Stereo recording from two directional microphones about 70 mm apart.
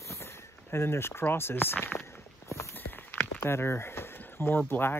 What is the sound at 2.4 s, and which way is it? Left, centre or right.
Walk, left.